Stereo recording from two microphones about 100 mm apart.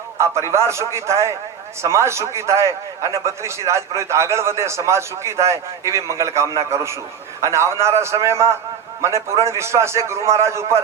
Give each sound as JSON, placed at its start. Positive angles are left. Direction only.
{"t": 0.2, "sound": "a man's voice", "side_deg": -30}